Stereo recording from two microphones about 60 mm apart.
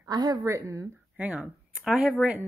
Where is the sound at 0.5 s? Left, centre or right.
Right.